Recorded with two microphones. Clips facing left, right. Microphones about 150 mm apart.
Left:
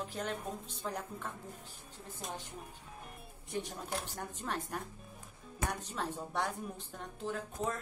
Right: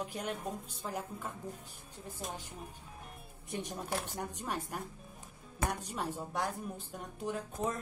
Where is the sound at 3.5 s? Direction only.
20° right (ahead or behind).